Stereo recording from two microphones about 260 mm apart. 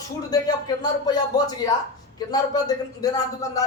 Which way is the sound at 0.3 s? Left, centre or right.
Centre.